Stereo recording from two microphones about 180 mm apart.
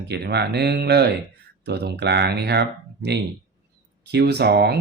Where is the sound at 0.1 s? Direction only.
65° right (ahead or behind).